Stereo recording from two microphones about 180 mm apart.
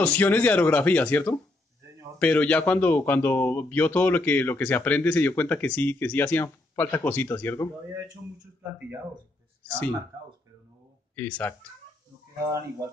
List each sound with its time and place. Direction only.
0.0 s a man's voice: 10° left (ahead or behind)
11.1 s a man's voice: 10° left (ahead or behind)
12.4 s speech: 15° right (ahead or behind)